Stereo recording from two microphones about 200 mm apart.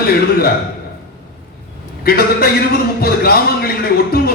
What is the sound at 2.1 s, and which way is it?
A man's voice, 50° left (ahead or behind).